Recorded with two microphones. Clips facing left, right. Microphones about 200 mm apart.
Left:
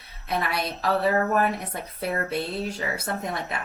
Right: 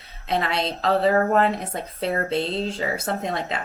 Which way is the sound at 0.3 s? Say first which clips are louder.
Right 3 dB; 25° right (ahead or behind).